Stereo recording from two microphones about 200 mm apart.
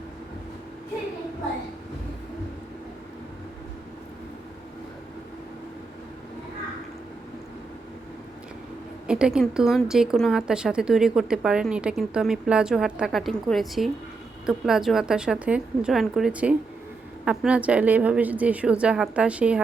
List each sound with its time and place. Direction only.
9.0 s a woman's voice: 5° right (ahead or behind)